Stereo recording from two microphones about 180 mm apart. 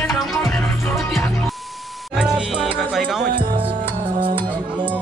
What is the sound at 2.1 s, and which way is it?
Music, 5° right (ahead or behind).